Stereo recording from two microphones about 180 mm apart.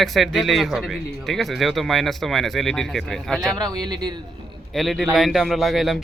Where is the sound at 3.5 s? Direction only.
20° right (ahead or behind).